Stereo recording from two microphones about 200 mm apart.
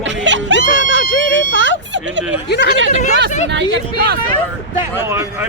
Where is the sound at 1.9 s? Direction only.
65° right (ahead or behind).